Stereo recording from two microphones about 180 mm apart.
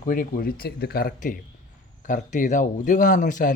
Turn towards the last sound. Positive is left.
turn(degrees=45)  # may be behind; listen again after turning